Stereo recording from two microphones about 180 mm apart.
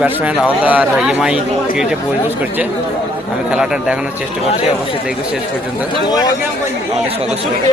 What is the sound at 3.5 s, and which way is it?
Speech, 5° right (ahead or behind).